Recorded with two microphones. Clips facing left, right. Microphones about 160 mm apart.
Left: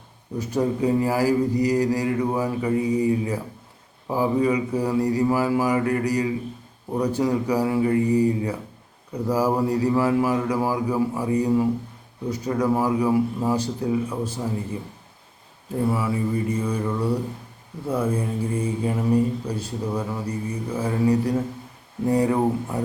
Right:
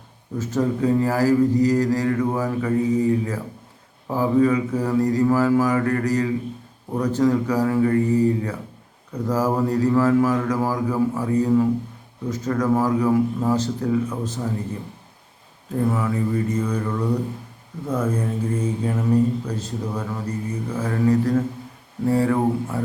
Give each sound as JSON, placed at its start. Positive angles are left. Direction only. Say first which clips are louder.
{"t": 0.3, "sound": "speech", "louder": "right 1 dB", "side_deg": 10}
{"t": 15.8, "sound": "speech", "louder": "right 1 dB", "side_deg": 10}